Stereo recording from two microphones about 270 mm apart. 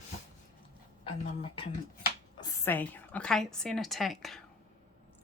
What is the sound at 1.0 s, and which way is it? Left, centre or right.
Speech, left.